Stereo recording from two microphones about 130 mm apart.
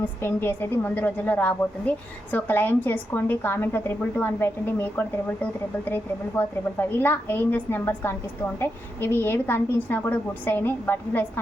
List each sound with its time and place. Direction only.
0.0 s a woman's voice: 15° left (ahead or behind)